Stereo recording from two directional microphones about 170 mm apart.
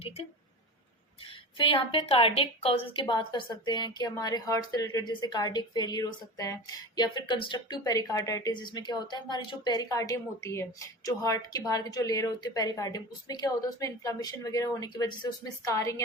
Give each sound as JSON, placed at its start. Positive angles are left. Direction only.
{"t": 1.5, "sound": "a woman's voice", "side_deg": 30}